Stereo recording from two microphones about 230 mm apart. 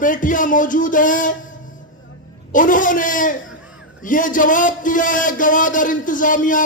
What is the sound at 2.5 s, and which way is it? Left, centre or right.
A man's voice, left.